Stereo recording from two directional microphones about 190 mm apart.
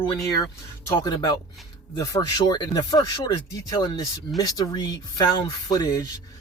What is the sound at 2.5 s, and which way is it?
Speech, 20° left (ahead or behind).